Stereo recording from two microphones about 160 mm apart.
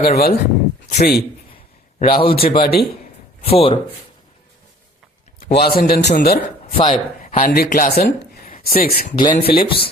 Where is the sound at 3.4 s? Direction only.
35° left (ahead or behind).